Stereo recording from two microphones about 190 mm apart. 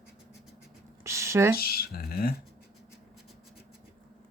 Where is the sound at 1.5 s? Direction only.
55° left (ahead or behind).